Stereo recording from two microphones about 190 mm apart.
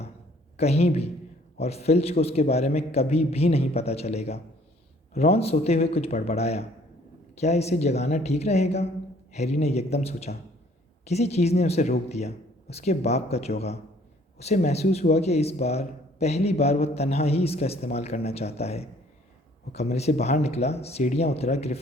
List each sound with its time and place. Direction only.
0.5 s a man's voice: 35° left (ahead or behind)